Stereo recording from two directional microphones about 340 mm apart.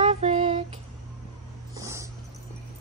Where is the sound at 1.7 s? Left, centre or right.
Centre.